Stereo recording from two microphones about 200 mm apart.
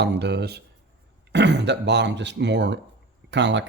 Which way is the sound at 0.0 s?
55° right (ahead or behind).